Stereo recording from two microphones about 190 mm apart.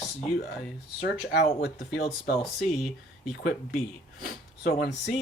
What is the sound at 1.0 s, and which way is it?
Speech, 60° left (ahead or behind).